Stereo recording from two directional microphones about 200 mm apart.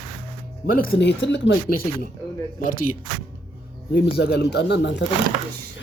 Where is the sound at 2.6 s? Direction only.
45° left (ahead or behind).